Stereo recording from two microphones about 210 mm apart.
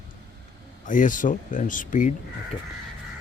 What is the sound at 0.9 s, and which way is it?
Speech, 40° left (ahead or behind).